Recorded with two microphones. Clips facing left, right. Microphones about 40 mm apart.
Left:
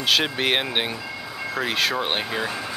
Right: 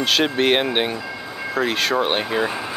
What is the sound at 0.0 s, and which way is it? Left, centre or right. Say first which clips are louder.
Speech: right 3 dB; centre.